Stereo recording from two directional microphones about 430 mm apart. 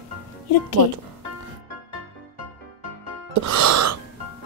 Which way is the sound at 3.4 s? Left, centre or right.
Right.